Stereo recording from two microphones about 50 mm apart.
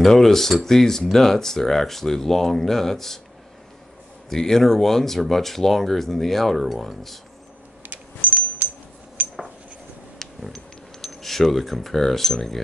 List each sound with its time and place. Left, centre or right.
0.0 s speech: centre
4.3 s speech: centre
7.9 s coin: right
9.2 s a sound: right
10.4 s speech: centre